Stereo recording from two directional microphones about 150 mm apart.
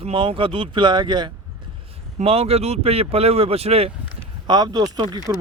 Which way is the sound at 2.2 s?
40° right (ahead or behind).